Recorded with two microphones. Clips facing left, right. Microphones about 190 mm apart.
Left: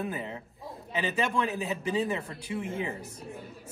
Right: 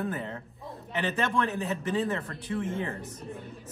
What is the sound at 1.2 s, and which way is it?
Speech, centre (ahead or behind).